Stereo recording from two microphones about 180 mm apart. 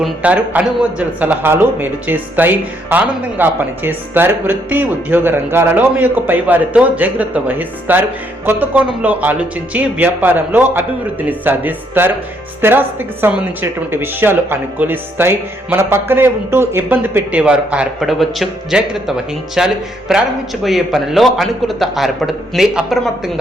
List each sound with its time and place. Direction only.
0.0 s a man's voice: 5° right (ahead or behind)